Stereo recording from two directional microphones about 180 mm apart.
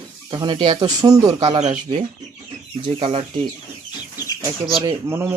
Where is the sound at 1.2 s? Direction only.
30° right (ahead or behind).